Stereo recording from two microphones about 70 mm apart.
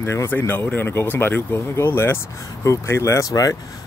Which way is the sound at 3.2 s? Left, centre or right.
Left.